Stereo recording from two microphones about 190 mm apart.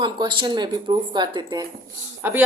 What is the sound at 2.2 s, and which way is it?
Speech, 10° right (ahead or behind).